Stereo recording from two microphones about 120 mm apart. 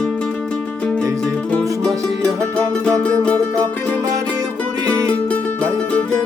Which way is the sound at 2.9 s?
10° left (ahead or behind).